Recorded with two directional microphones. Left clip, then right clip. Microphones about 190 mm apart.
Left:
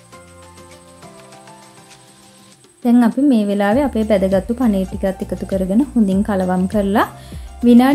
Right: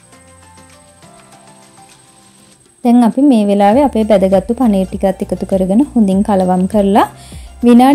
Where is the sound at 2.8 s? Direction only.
25° right (ahead or behind).